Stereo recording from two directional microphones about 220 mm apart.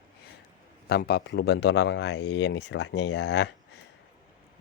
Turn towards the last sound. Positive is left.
turn(degrees=50)  # may be behind; listen again after turning